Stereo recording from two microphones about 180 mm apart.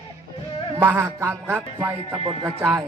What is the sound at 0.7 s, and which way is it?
Music, 10° right (ahead or behind).